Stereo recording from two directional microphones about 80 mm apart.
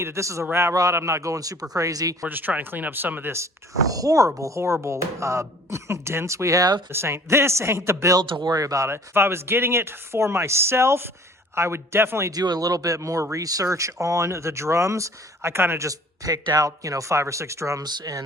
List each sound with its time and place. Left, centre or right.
0.0 s speech: right
2.2 s speech: centre; by 8.2 s right
8.2 s speech: right
8.4 s speech: right
12.3 s speech: right
15.9 s speech: right
17.8 s speech: right